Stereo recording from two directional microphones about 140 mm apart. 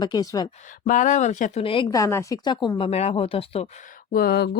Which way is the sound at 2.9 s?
50° left (ahead or behind).